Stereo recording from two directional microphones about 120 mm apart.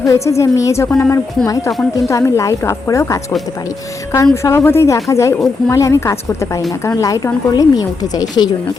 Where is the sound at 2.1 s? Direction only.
25° left (ahead or behind).